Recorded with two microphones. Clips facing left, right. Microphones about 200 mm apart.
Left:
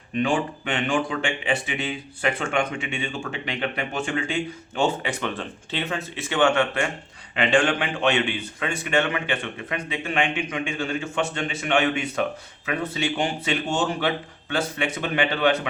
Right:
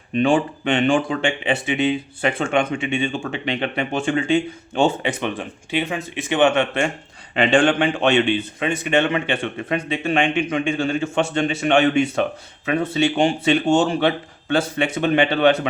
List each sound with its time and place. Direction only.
0.2 s speech: 30° right (ahead or behind)